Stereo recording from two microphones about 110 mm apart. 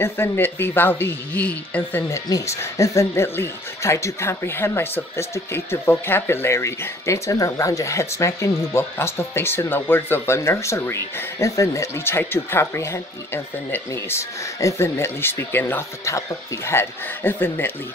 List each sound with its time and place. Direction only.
0.0 s speech: 20° left (ahead or behind)
2.2 s speech: 30° left (ahead or behind)